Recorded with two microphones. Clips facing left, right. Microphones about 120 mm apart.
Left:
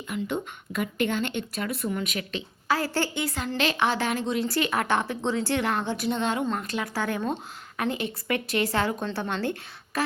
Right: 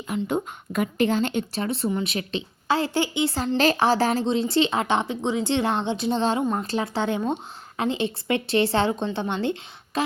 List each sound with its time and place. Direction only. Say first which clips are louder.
0.1 s a woman's voice: right 4 dB; 40° right (ahead or behind)
1.5 s speech: right 4 dB; 30° right (ahead or behind)
3.2 s a woman's voice: right 6 dB; 35° right (ahead or behind)
6.4 s speech: right 3 dB; 15° right (ahead or behind)
6.7 s speech: right 4 dB; 30° right (ahead or behind)